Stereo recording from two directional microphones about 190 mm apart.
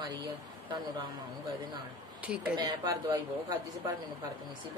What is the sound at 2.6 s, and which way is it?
Speech, 20° right (ahead or behind).